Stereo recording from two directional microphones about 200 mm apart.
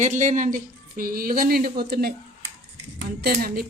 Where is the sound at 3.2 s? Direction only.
50° right (ahead or behind).